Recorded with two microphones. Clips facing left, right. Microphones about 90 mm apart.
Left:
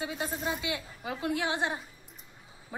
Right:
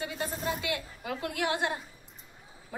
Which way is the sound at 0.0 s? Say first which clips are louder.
Even; 20° left (ahead or behind).